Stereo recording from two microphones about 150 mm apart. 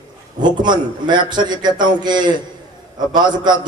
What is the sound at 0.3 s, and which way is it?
A man's voice, 30° right (ahead or behind).